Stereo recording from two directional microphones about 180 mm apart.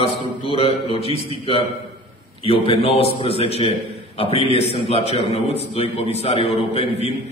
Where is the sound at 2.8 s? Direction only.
35° left (ahead or behind).